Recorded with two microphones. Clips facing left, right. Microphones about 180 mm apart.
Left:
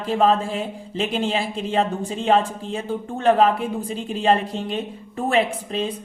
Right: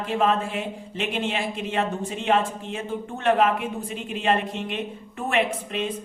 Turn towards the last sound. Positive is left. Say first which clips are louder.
# left 2 dB
turn(degrees=35)  # may be behind; listen again after turning